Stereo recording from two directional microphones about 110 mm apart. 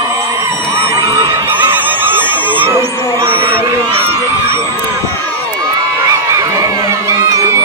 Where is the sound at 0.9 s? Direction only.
30° right (ahead or behind).